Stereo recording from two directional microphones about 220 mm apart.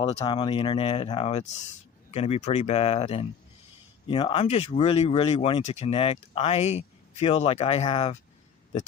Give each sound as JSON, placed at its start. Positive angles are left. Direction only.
{"t": 0.0, "sound": "speech", "side_deg": 20}